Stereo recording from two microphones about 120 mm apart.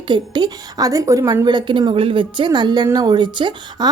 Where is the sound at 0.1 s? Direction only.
35° right (ahead or behind).